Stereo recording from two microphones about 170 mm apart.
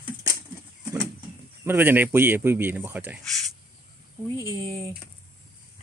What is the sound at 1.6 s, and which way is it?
Speech, 15° right (ahead or behind).